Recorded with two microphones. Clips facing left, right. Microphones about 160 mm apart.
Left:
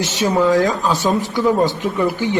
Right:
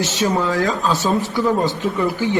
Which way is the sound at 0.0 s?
15° left (ahead or behind).